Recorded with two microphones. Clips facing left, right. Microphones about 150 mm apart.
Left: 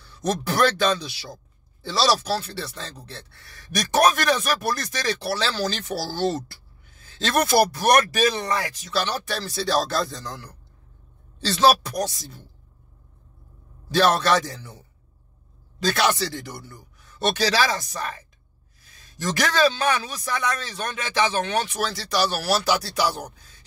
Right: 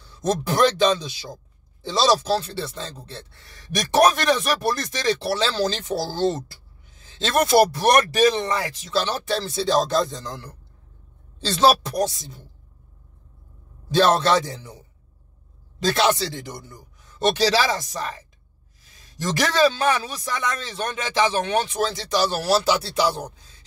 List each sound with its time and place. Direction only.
0.0 s speech: 25° right (ahead or behind)
13.8 s speech: 25° right (ahead or behind)
15.9 s speech: 25° right (ahead or behind)
19.2 s speech: 25° right (ahead or behind)